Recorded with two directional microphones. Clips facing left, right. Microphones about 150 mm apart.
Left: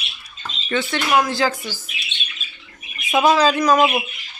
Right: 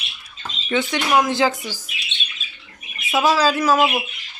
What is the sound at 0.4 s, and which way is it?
Speech, 15° right (ahead or behind).